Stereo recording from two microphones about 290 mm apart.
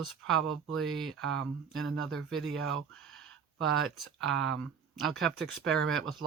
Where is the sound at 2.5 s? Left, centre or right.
Right.